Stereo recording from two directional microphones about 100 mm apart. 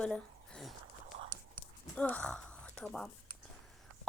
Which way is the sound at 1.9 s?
15° left (ahead or behind).